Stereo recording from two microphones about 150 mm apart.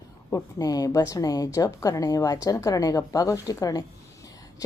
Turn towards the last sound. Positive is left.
turn(degrees=25)  # may be behind; listen again after turning